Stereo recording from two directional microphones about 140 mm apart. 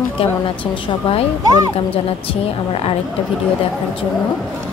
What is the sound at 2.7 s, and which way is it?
Speech, 45° left (ahead or behind).